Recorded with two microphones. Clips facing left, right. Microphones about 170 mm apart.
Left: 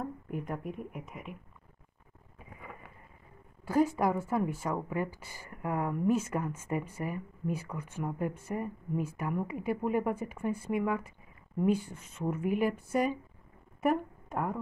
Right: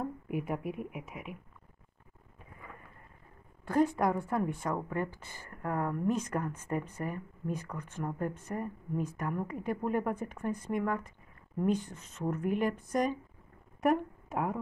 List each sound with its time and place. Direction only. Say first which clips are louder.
0.0 s a woman's voice: right 2 dB; 10° right (ahead or behind)
3.6 s a woman's voice: left 1 dB; 5° left (ahead or behind)